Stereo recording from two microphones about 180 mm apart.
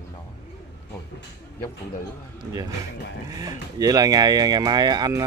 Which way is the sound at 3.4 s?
20° right (ahead or behind).